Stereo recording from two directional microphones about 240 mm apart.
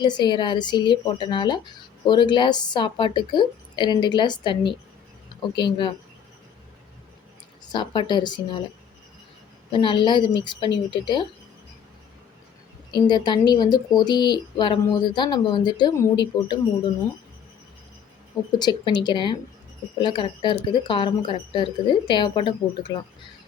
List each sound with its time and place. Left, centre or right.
0.0 s speech: centre
7.6 s speech: centre
9.7 s speech: centre
12.9 s speech: centre
18.6 s speech: centre